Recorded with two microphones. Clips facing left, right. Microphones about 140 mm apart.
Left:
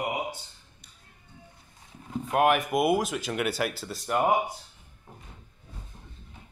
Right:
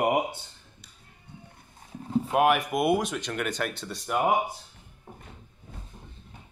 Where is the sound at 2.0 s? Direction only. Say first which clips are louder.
Right 7 dB; 30° right (ahead or behind).